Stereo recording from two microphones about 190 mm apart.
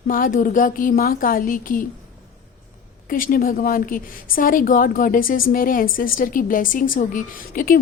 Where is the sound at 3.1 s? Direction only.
45° left (ahead or behind).